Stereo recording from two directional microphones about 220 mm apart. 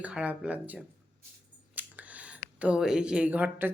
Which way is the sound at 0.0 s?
5° right (ahead or behind).